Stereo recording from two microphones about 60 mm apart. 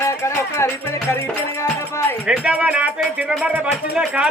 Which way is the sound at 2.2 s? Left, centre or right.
Centre.